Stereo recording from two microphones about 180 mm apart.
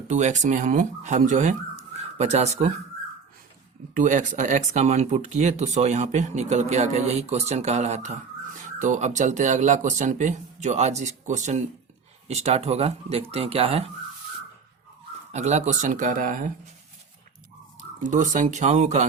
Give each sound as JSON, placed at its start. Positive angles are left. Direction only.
{"t": 0.1, "sound": "speech", "side_deg": -40}
{"t": 3.9, "sound": "speech", "side_deg": -45}
{"t": 15.3, "sound": "speech", "side_deg": -40}
{"t": 18.0, "sound": "speech", "side_deg": -45}